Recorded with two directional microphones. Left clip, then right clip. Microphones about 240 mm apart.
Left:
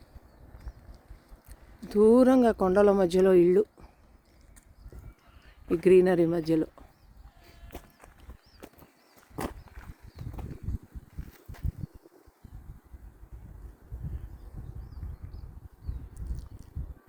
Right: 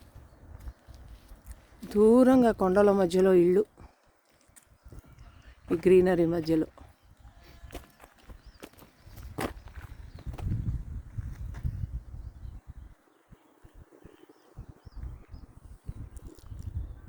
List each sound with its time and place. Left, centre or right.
1.5 s speech: centre
5.8 s speech: centre
8.6 s horse: right
10.2 s horse: left